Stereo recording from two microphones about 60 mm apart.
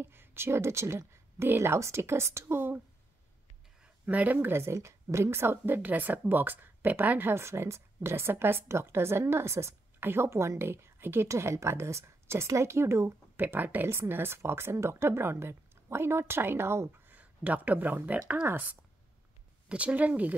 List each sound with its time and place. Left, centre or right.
0.0 s speech: right
4.0 s speech: right
9.9 s a woman's voice: right
11.2 s speech: right
13.8 s speech: right
17.2 s speech: right